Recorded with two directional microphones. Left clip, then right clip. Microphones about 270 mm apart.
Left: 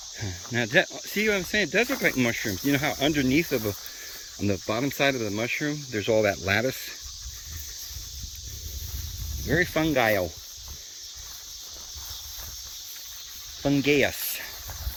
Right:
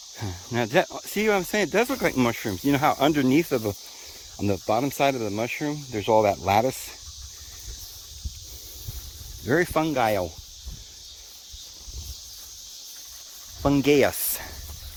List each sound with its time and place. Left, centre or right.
0.2 s speech: centre
6.1 s speech: right
9.7 s speech: centre
13.6 s speech: centre